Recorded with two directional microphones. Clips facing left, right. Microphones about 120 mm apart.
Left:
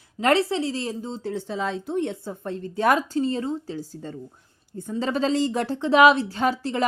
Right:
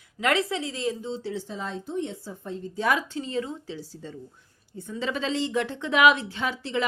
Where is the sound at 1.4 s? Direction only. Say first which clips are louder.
Left 6 dB; 85° left; by 2.9 s 65° left (ahead or behind).